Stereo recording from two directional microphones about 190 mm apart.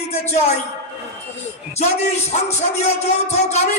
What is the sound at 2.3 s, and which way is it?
A man's voice, 35° left (ahead or behind).